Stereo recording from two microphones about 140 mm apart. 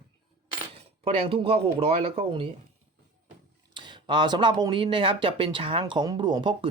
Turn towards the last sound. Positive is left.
turn(degrees=-35)  # may be behind; listen again after turning